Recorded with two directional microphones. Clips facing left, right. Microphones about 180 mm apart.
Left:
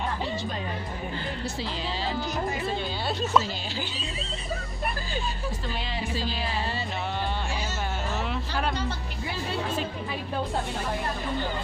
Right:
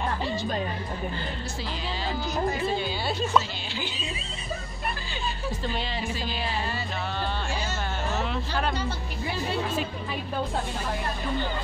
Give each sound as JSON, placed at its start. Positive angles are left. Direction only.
{"t": 2.8, "sound": "speech", "side_deg": 0}
{"t": 3.8, "sound": "speech", "side_deg": -15}